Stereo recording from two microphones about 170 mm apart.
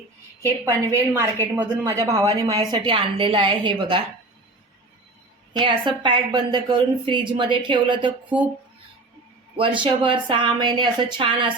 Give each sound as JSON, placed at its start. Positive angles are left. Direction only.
{"t": 0.4, "sound": "a woman's voice", "side_deg": -20}
{"t": 5.5, "sound": "a woman's voice", "side_deg": -30}
{"t": 9.6, "sound": "a woman's voice", "side_deg": -30}